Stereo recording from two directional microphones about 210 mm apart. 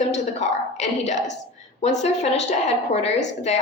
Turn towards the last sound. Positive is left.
turn(degrees=30)  # may be behind; listen again after turning